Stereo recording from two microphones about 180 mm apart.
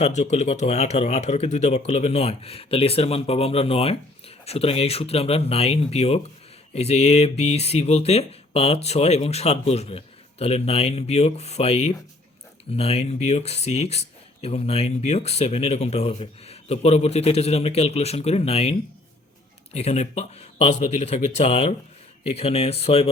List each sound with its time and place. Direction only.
0.0 s speech: 40° left (ahead or behind)